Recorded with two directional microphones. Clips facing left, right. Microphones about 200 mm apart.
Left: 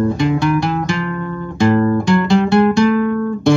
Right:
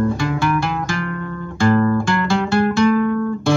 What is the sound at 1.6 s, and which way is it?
Guitar, 20° left (ahead or behind).